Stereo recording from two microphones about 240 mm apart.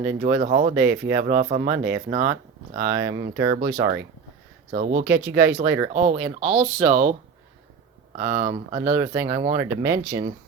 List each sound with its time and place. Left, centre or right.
0.0 s speech: right
2.7 s speech: centre
4.7 s speech: right
5.2 s speech: centre
5.9 s speech: right
8.2 s speech: right
9.0 s speech: centre